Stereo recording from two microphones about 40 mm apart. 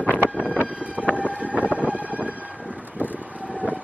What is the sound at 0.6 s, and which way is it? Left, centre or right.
Vehicle, right.